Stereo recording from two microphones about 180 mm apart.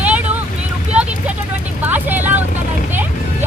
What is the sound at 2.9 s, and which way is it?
Music, 10° right (ahead or behind).